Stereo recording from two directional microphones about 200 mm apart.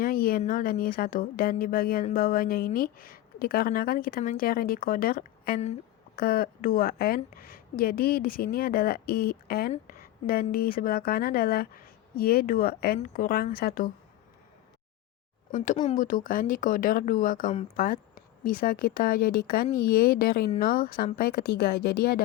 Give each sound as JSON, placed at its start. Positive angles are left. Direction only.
{"t": 0.0, "sound": "a woman's voice", "side_deg": 45}
{"t": 9.7, "sound": "a sound", "side_deg": 45}
{"t": 10.5, "sound": "a woman's voice", "side_deg": 50}
{"t": 15.5, "sound": "a woman's voice", "side_deg": 40}